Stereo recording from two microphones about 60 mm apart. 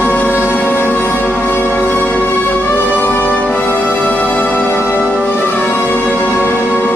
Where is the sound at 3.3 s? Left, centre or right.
Left.